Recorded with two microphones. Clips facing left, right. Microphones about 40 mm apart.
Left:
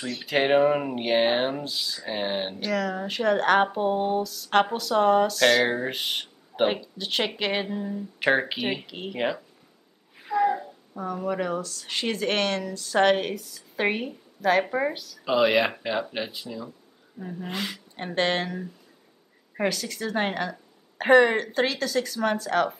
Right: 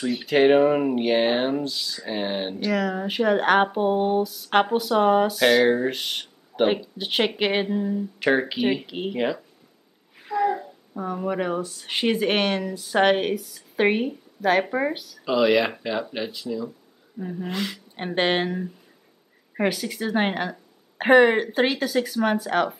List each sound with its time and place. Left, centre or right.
0.2 s speech: centre
2.7 s speech: centre
5.7 s speech: centre
6.7 s speech: centre
8.2 s speech: centre
8.8 s speech: centre
9.1 s speech: centre
10.1 s a sound: centre
11.1 s speech: centre
15.2 s speech: centre
17.2 s speech: centre
17.5 s speech: centre
17.9 s speech: right